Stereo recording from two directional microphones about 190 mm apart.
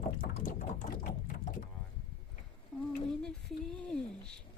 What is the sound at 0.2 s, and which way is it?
Sewing machine, 45° left (ahead or behind).